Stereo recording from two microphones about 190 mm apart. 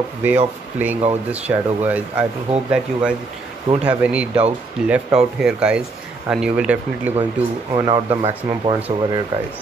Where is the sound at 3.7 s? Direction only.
30° right (ahead or behind).